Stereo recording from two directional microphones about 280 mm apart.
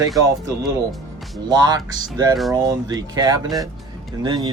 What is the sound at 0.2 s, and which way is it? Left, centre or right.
Speech, centre.